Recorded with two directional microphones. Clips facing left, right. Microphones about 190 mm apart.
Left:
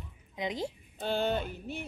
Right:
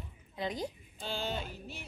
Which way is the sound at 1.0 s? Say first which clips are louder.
Left 7 dB; 55° left (ahead or behind).